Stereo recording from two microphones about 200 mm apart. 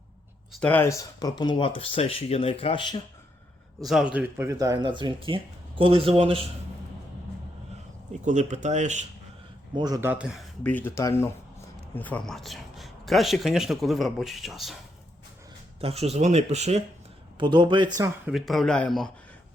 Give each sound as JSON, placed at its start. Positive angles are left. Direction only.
{"t": 0.6, "sound": "speech", "side_deg": 10}
{"t": 3.8, "sound": "speech", "side_deg": -5}
{"t": 8.2, "sound": "speech", "side_deg": -35}
{"t": 9.7, "sound": "speech", "side_deg": -20}
{"t": 15.8, "sound": "speech", "side_deg": -30}
{"t": 17.3, "sound": "speech", "side_deg": -25}
{"t": 18.3, "sound": "speech", "side_deg": 0}